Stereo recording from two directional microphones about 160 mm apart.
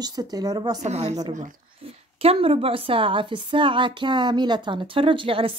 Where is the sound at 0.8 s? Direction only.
45° right (ahead or behind).